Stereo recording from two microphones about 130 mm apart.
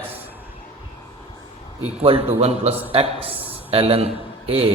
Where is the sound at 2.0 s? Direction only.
50° right (ahead or behind).